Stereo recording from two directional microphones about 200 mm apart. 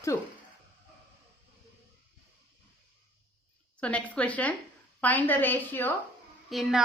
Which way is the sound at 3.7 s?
5° left (ahead or behind).